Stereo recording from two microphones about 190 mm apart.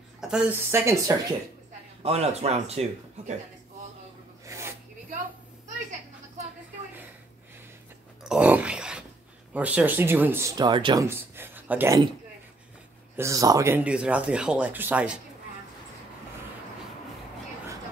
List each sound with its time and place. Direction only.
0.2 s speech: 5° right (ahead or behind)
2.0 s speech: 35° right (ahead or behind)
4.5 s a sound: 15° right (ahead or behind)
8.2 s dog: 5° right (ahead or behind)
9.5 s speech: 10° right (ahead or behind); by 11.1 s 25° right (ahead or behind)
11.1 s speech: 10° right (ahead or behind)
13.1 s speech: 15° right (ahead or behind)